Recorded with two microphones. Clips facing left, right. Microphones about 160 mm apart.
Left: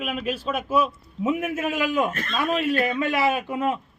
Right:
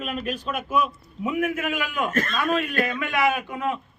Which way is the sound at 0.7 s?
30° left (ahead or behind).